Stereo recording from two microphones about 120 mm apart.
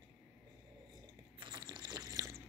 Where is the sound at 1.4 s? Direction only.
35° right (ahead or behind).